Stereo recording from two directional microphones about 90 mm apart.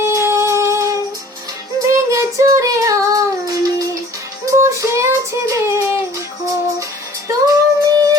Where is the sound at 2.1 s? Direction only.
35° right (ahead or behind).